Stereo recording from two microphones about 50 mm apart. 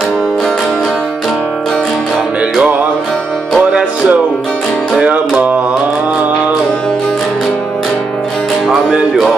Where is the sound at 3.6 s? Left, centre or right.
Centre.